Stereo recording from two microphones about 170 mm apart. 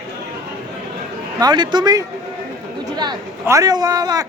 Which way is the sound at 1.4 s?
25° right (ahead or behind).